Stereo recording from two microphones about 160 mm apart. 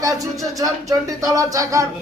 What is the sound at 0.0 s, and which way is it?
A man's voice, 20° right (ahead or behind).